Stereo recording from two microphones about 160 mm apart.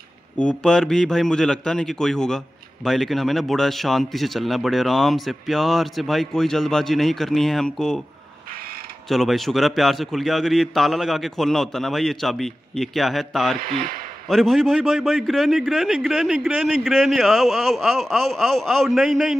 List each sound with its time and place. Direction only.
0.4 s a man's voice: 5° left (ahead or behind)
9.1 s a man's voice: centre (ahead or behind)
13.6 s speech: 65° right (ahead or behind)
14.3 s a man's voice: centre (ahead or behind)